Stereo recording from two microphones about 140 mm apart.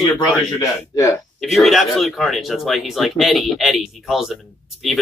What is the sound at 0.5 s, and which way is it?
Speech, 25° left (ahead or behind).